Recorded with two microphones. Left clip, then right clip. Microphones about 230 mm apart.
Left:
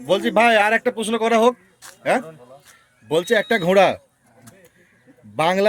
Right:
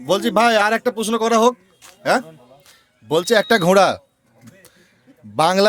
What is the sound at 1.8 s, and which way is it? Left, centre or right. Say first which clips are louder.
Speech: left 4 dB; centre.